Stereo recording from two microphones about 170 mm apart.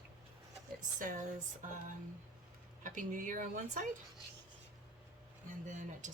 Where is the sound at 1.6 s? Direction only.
50° right (ahead or behind).